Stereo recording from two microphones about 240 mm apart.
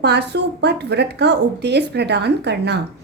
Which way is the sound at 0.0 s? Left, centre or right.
Right.